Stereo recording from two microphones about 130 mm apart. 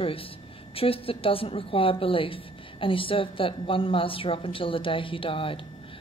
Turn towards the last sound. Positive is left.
turn(degrees=45)  # may be behind; listen again after turning